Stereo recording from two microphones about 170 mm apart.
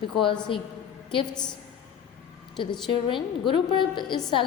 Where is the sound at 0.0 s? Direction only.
30° left (ahead or behind).